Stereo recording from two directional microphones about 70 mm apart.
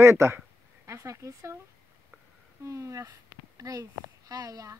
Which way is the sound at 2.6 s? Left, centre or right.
Right.